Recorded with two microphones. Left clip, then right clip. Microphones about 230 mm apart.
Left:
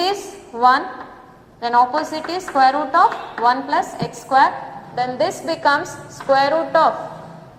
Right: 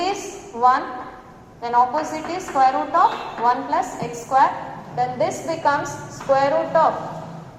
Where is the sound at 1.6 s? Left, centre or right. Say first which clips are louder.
Left 2 dB; left.